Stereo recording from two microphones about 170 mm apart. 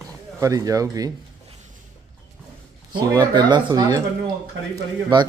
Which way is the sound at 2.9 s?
25° right (ahead or behind).